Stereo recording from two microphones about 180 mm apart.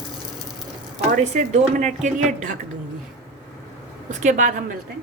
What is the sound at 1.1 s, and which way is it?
Speech, 45° right (ahead or behind).